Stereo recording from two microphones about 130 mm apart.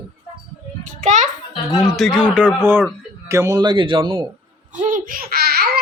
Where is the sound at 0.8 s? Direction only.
70° right (ahead or behind).